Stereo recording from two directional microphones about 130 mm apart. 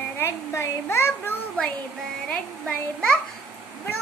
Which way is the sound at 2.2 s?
5° left (ahead or behind).